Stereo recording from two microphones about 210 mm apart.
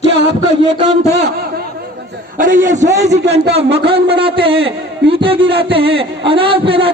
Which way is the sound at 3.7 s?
50° right (ahead or behind).